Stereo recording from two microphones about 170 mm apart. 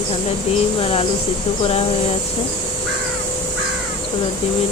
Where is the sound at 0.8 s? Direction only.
35° left (ahead or behind).